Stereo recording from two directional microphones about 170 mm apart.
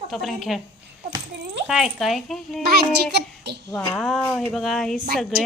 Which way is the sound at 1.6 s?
5° right (ahead or behind).